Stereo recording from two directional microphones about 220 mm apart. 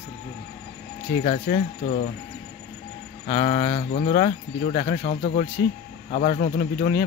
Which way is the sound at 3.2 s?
30° left (ahead or behind).